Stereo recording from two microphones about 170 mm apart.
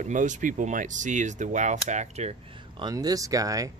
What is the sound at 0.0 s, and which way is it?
Speech, 45° right (ahead or behind).